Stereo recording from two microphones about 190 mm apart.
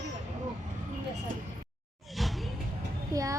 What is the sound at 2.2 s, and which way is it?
Music, centre (ahead or behind).